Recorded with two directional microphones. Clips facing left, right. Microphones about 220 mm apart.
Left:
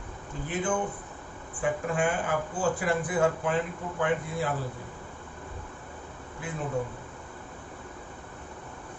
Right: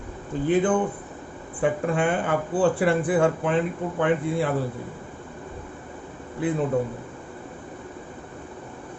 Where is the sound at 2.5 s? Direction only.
90° right.